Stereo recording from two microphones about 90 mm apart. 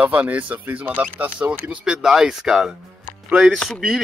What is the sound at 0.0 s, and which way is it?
A woman's voice, 15° right (ahead or behind).